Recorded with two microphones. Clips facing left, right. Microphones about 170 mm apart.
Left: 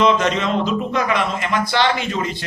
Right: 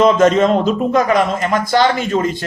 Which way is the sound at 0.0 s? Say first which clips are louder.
Right 6 dB; 45° right (ahead or behind).